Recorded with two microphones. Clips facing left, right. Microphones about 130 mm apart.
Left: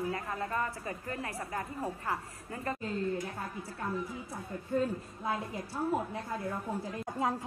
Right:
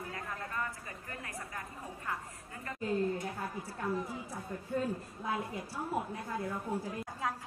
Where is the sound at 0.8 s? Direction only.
35° left (ahead or behind).